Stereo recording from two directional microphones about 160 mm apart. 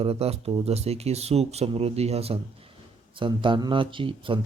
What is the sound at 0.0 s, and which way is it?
Speech, 40° right (ahead or behind).